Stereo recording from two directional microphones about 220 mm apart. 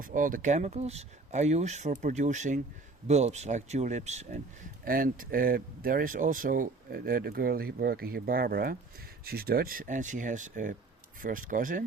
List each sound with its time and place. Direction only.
0.0 s speech: 40° right (ahead or behind)